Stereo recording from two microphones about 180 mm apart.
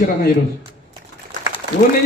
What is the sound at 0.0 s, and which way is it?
Speech, 55° left (ahead or behind).